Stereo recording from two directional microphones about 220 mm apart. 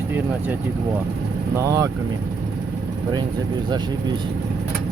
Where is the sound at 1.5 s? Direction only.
15° right (ahead or behind).